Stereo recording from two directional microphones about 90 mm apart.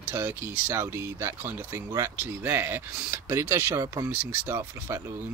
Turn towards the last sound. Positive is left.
turn(degrees=-30)  # may be behind; listen again after turning